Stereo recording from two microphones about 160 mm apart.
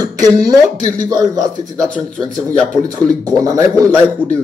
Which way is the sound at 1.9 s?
5° left (ahead or behind).